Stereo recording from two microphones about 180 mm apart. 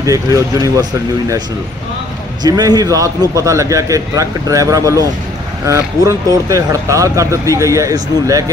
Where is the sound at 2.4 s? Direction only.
20° right (ahead or behind).